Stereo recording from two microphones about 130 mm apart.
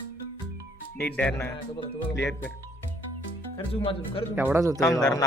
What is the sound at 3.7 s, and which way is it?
Speech, 45° left (ahead or behind).